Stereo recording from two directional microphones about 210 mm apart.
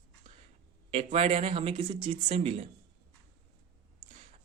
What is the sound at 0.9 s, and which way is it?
Speech, 30° right (ahead or behind).